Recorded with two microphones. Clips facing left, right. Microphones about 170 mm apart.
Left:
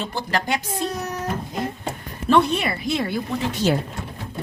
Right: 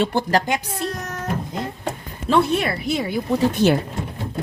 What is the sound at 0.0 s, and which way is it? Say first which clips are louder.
Speech: right 8 dB; 60° right (ahead or behind).